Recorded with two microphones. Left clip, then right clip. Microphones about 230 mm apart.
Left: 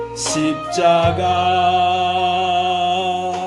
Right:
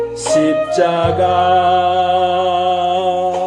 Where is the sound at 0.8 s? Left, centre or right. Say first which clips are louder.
Left 2 dB; left.